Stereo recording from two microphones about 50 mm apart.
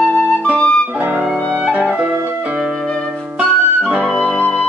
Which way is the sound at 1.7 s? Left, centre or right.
Right.